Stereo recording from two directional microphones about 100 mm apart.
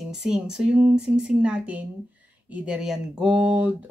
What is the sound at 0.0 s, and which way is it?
Speech, 5° right (ahead or behind).